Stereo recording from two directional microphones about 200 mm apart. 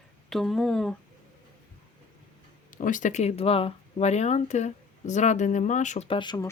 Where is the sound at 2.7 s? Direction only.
40° left (ahead or behind); by 6.5 s 20° left (ahead or behind).